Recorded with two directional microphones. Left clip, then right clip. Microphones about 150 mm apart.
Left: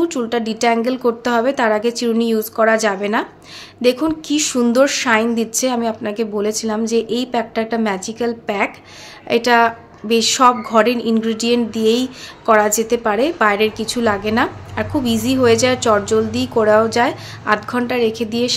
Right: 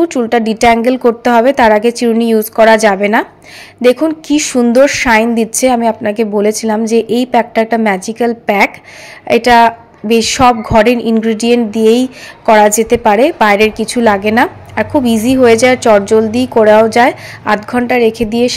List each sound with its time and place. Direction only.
0.0 s a woman's voice: 30° right (ahead or behind)